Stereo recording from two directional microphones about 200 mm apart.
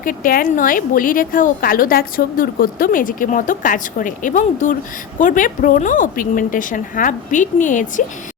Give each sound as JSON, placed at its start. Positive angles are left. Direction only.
{"t": 0.0, "sound": "a woman's voice", "side_deg": 45}